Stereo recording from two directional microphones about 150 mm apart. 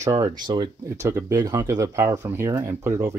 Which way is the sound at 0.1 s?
25° right (ahead or behind).